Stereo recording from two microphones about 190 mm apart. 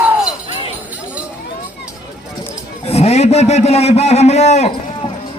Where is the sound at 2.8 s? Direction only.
35° left (ahead or behind).